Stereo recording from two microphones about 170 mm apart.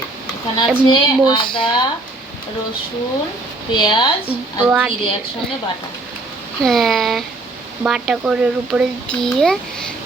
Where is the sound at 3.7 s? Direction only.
25° left (ahead or behind).